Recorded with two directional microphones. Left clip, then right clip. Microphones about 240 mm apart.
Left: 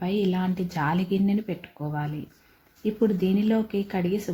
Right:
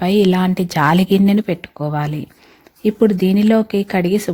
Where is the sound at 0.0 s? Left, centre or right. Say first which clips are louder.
Right 12 dB; right.